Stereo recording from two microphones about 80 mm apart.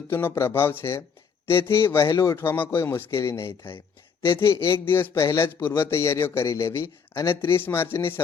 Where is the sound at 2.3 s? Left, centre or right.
Left.